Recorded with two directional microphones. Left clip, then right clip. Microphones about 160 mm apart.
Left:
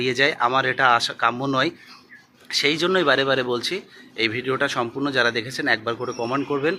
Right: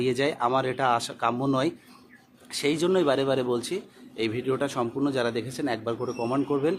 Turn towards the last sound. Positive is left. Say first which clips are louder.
# left 3 dB
turn(degrees=0)  # may be behind; listen again after turning